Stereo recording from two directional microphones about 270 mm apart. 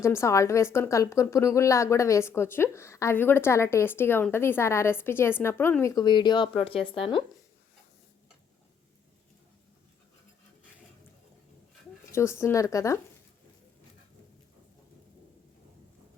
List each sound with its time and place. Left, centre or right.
0.0 s a woman's voice: centre
12.1 s a woman's voice: centre